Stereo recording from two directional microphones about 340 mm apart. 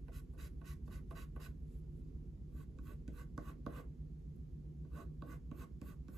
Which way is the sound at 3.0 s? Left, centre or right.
Centre.